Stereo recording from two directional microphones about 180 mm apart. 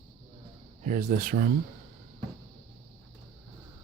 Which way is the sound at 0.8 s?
50° right (ahead or behind).